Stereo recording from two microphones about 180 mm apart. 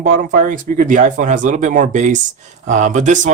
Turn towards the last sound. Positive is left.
turn(degrees=-40)  # may be behind; listen again after turning